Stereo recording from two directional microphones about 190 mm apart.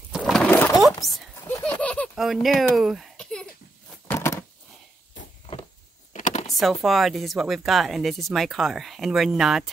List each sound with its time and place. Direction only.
0.1 s pigeon: 5° left (ahead or behind)
1.0 s speech: centre (ahead or behind)
1.5 s a sound: 5° left (ahead or behind)
6.1 s computer keyboard: 40° left (ahead or behind)
6.6 s speech: centre (ahead or behind)